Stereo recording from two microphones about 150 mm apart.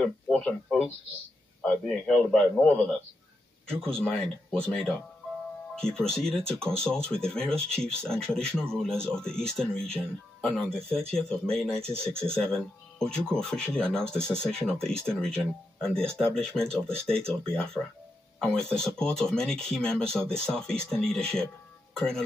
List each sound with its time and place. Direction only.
0.0 s speech: 10° left (ahead or behind)